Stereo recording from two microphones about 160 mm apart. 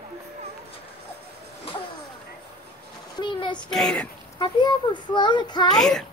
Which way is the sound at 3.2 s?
30° left (ahead or behind).